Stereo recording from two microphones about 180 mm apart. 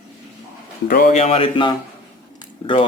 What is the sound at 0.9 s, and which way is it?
Speech, 55° left (ahead or behind).